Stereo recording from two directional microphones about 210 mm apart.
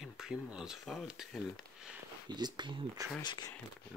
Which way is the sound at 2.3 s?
20° right (ahead or behind).